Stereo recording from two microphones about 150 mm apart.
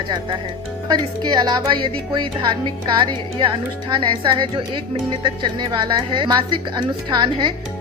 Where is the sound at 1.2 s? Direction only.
30° right (ahead or behind).